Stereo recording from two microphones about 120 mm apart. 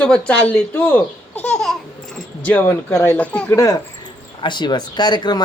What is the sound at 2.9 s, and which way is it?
Speech, 20° left (ahead or behind).